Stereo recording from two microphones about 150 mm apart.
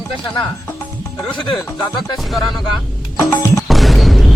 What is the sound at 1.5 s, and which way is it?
Speech, 25° left (ahead or behind).